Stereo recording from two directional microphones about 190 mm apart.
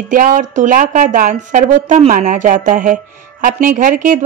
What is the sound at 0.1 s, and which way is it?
A woman's voice, 45° right (ahead or behind).